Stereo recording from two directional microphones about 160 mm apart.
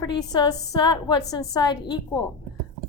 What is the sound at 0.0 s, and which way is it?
A woman's voice, 25° left (ahead or behind).